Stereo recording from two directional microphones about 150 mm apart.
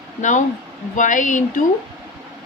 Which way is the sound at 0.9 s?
60° left (ahead or behind).